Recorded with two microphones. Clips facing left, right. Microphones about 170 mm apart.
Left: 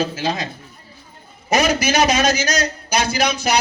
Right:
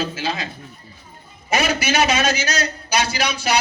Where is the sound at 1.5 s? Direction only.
40° left (ahead or behind).